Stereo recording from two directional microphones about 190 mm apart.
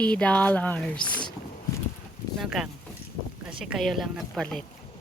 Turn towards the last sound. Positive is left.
turn(degrees=5)  # may be behind; listen again after turning